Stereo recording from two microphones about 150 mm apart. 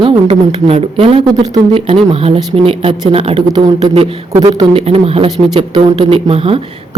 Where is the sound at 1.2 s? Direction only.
30° right (ahead or behind).